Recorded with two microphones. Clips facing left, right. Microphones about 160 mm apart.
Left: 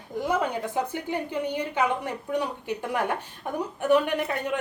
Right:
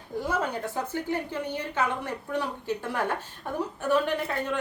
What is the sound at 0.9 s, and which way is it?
A woman's voice, 15° left (ahead or behind).